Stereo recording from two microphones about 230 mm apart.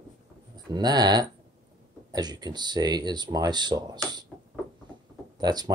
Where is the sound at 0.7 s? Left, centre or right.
Centre.